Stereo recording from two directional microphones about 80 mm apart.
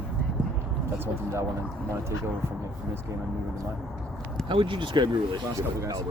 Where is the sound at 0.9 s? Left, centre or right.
Right.